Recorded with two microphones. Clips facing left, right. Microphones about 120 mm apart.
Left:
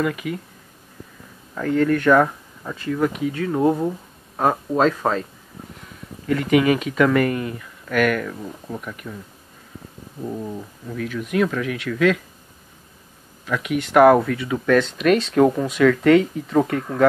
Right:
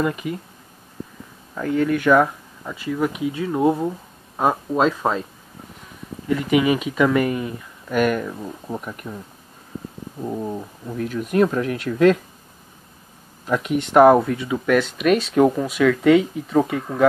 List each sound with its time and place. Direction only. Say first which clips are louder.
0.0 s speech: even; 25° right (ahead or behind)
1.5 s speech: left 1 dB; 5° right (ahead or behind)
6.2 s speech: left 1 dB; 15° right (ahead or behind)
10.2 s speech: right 2 dB; 20° right (ahead or behind)
11.0 s speech: right 3 dB; 40° right (ahead or behind)
13.5 s speech: right 2 dB; 40° right (ahead or behind)
13.7 s speech: even; 25° right (ahead or behind); by 17.1 s 10° right (ahead or behind)